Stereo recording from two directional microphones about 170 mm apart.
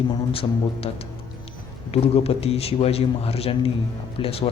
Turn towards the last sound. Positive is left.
turn(degrees=35)  # may be behind; listen again after turning